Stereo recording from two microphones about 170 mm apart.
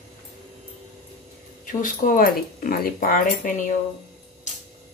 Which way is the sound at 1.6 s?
50° left (ahead or behind).